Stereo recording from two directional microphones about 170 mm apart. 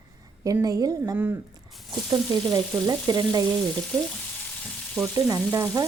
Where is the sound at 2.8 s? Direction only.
20° right (ahead or behind).